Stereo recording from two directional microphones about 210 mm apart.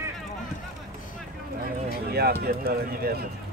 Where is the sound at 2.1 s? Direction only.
50° right (ahead or behind).